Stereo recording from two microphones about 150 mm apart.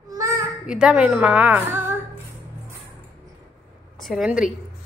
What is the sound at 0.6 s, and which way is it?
A woman's voice, 5° right (ahead or behind).